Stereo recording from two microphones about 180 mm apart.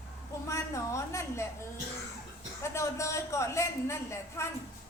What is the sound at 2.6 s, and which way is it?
A woman's voice, 15° left (ahead or behind).